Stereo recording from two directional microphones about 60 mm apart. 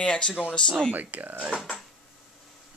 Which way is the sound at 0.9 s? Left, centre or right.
Right.